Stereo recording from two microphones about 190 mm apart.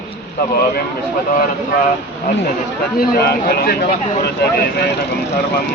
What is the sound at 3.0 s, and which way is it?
Speech, 55° left (ahead or behind).